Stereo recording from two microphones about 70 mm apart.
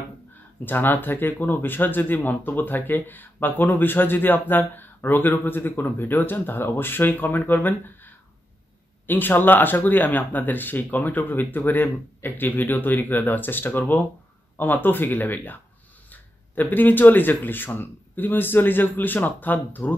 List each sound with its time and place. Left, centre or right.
0.7 s speech: left